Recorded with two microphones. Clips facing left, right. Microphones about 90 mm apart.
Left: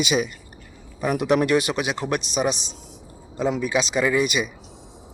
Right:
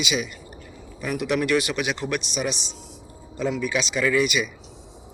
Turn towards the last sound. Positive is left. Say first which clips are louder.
# even
turn(degrees=35)  # may be behind; listen again after turning